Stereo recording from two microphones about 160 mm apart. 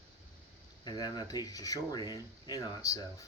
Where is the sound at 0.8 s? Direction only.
25° left (ahead or behind).